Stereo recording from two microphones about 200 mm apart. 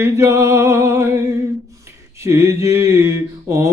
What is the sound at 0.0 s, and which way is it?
Mantra, 15° right (ahead or behind).